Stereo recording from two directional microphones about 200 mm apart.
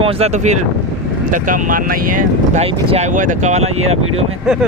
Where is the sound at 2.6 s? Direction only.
30° right (ahead or behind).